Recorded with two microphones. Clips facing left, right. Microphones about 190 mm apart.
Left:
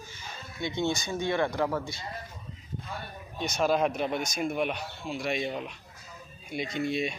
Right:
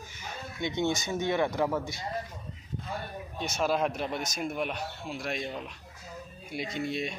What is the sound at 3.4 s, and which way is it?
Speech, centre (ahead or behind).